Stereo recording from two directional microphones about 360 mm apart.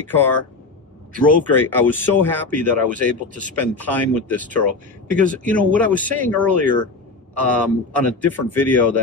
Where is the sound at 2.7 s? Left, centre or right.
Right.